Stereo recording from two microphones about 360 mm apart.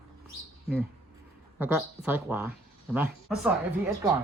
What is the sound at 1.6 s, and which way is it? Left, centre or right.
Speech, centre.